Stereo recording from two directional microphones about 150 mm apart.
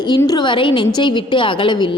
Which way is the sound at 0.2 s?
25° left (ahead or behind).